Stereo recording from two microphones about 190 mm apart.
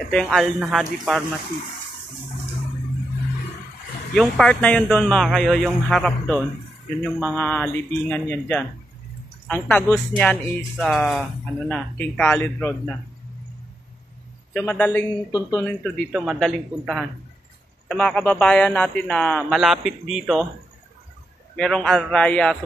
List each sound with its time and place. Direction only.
0.1 s speech: centre (ahead or behind)
4.1 s speech: 5° left (ahead or behind)
14.5 s speech: 10° left (ahead or behind)
21.5 s speech: 5° left (ahead or behind)